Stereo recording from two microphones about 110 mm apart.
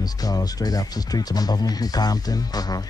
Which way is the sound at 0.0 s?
35° left (ahead or behind).